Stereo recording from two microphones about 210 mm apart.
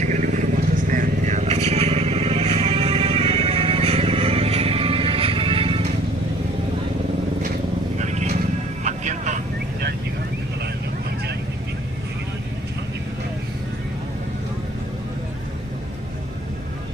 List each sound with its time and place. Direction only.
0.0 s vehicle: 35° right (ahead or behind)
7.9 s music: 35° right (ahead or behind)
8.8 s vehicle: 35° right (ahead or behind)